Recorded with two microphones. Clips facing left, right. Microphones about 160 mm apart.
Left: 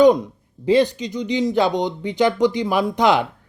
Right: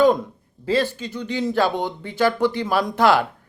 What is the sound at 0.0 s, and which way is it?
Speech, 15° left (ahead or behind).